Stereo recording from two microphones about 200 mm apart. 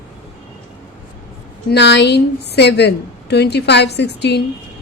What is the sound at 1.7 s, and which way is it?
A woman's voice, 60° left (ahead or behind).